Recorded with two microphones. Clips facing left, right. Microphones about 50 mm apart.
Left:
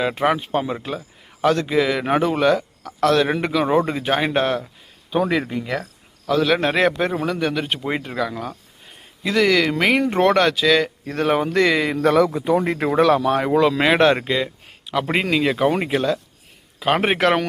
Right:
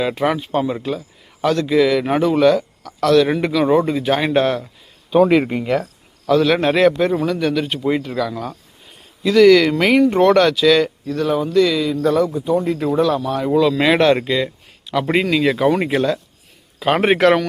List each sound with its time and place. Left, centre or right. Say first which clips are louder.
0.0 s a man's voice: right 1 dB; centre
3.8 s speech: right 4 dB; left
4.1 s speech: right 3 dB; centre
6.2 s a man's voice: right 3 dB; centre
6.8 s speech: right 5 dB; centre
10.0 s speech: right 6 dB; left
11.0 s speech: right 1 dB; left
12.0 s a man's voice: left 1 dB; left
12.6 s speech: right 1 dB; left
12.9 s speech: left 3 dB; left
13.5 s speech: right 3 dB; left
13.7 s a man's voice: right 2 dB; centre